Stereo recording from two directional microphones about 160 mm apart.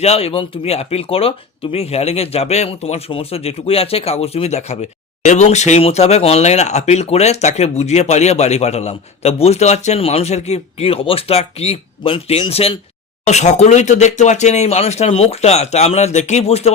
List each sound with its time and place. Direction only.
0.0 s speech: 40° left (ahead or behind)